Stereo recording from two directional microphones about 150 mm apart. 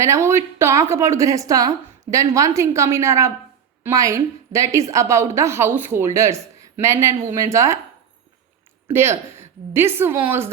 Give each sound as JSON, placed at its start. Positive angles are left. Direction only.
{"t": 0.0, "sound": "a woman's voice", "side_deg": -20}
{"t": 8.9, "sound": "a woman's voice", "side_deg": -15}